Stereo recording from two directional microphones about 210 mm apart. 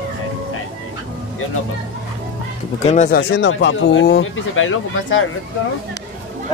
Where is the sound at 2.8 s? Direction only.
35° left (ahead or behind).